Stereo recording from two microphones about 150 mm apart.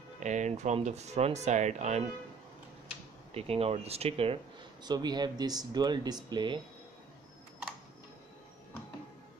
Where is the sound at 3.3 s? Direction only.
40° right (ahead or behind).